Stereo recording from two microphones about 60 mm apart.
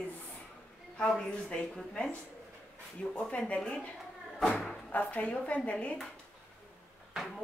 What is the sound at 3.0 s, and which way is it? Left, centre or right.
Speech, centre.